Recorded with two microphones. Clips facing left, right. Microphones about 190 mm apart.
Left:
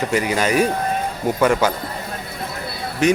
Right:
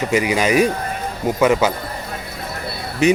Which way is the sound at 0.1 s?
10° right (ahead or behind).